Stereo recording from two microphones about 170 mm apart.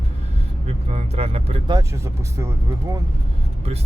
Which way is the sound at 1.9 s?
15° right (ahead or behind).